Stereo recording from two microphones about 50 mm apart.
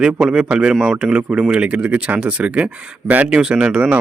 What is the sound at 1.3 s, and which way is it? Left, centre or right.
Speech, right.